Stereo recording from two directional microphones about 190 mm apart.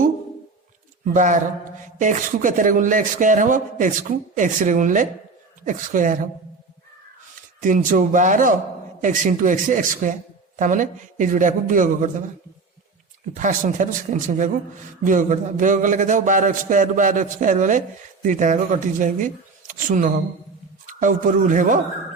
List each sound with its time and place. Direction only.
1.0 s a man's voice: 40° right (ahead or behind)
7.6 s a man's voice: 45° right (ahead or behind)
13.3 s a man's voice: 40° right (ahead or behind)